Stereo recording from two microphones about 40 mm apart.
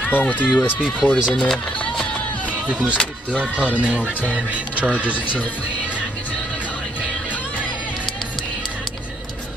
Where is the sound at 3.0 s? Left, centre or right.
Left.